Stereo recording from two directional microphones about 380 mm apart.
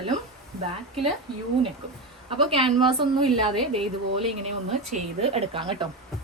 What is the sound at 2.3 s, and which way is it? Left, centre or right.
Speech, centre.